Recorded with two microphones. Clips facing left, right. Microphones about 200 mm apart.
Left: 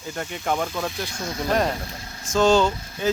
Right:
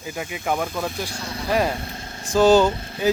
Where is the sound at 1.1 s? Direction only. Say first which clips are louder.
Left 2 dB; 35° right (ahead or behind).